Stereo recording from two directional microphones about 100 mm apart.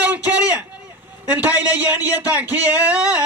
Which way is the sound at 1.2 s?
15° right (ahead or behind).